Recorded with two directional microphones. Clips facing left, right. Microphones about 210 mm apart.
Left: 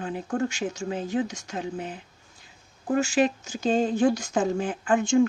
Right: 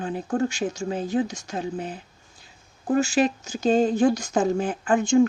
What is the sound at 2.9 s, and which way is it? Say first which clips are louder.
Speech: right 2 dB; 35° right (ahead or behind).